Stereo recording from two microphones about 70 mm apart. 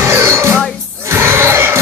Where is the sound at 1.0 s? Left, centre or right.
Right.